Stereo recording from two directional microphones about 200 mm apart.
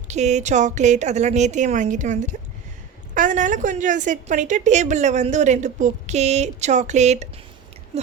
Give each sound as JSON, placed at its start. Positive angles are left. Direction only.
{"t": 0.1, "sound": "a woman's voice", "side_deg": -35}